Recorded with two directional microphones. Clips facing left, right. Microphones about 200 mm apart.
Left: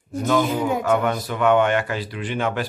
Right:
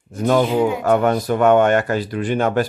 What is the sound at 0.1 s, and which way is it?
Speech, 45° right (ahead or behind).